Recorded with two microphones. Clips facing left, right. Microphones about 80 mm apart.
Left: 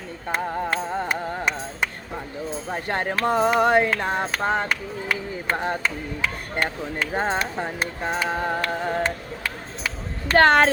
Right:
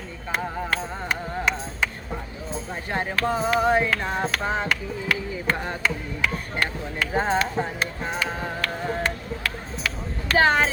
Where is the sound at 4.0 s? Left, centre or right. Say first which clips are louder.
Left 2 dB; left.